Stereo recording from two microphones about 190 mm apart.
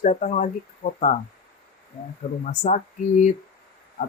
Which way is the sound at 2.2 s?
50° left (ahead or behind).